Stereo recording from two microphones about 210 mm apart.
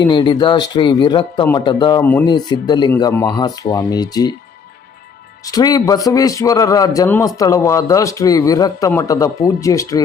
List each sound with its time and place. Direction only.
0.0 s speech: 20° left (ahead or behind)
5.5 s a man's voice: 15° left (ahead or behind)